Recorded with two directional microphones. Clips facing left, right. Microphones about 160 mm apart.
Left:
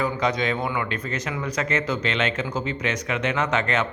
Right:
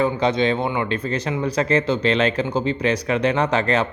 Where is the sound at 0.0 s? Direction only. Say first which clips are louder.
Right 5 dB; 25° right (ahead or behind).